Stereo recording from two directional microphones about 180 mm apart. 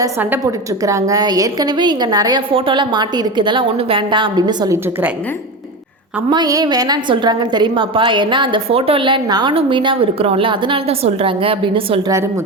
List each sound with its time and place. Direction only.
0.0 s a woman's voice: 10° right (ahead or behind)
6.3 s a woman's voice: 20° right (ahead or behind)